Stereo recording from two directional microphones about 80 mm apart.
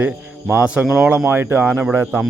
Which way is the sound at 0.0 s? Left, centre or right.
Centre.